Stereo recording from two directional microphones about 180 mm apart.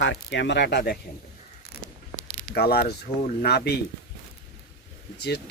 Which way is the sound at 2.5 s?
60° left (ahead or behind).